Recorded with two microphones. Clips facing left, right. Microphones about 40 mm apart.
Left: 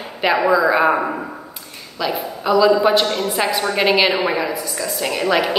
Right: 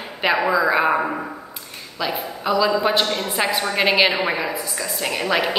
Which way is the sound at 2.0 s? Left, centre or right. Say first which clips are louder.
Left 2 dB; centre.